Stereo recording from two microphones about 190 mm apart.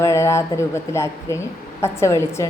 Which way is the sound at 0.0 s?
15° left (ahead or behind).